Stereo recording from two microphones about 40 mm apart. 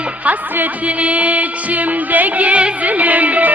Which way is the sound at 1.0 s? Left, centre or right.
Right.